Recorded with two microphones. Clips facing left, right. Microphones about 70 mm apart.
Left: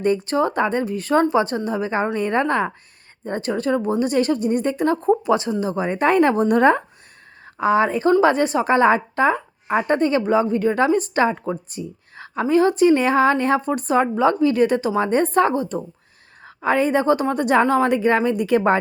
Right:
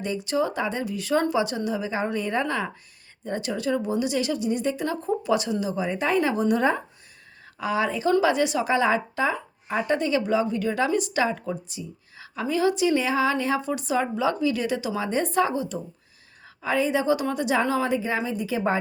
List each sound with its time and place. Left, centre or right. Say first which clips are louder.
0.0 s a woman's voice: left 6 dB; left
7.6 s a woman's voice: left 7 dB; left